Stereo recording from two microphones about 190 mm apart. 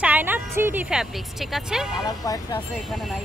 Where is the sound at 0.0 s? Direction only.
10° right (ahead or behind).